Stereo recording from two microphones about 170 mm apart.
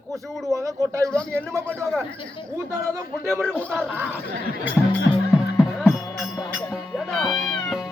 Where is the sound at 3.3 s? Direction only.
5° left (ahead or behind).